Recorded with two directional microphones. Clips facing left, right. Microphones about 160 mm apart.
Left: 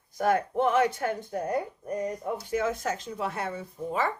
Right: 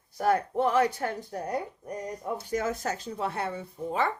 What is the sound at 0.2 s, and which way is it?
Speech, 35° right (ahead or behind).